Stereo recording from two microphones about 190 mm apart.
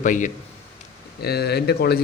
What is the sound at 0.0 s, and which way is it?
Speech, 40° left (ahead or behind).